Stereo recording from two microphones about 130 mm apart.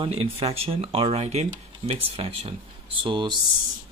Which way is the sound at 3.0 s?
40° right (ahead or behind).